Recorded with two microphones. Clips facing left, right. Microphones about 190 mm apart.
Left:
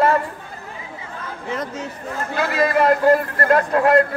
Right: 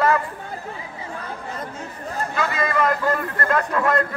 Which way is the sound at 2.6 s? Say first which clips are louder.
Left 7 dB; 35° left (ahead or behind).